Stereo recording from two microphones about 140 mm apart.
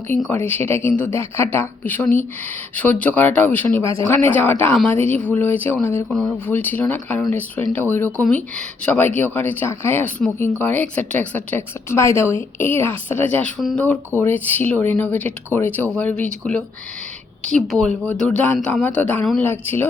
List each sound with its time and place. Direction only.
0.3 s speech: 15° left (ahead or behind)
13.6 s speech: centre (ahead or behind)
14.2 s speech: 15° left (ahead or behind)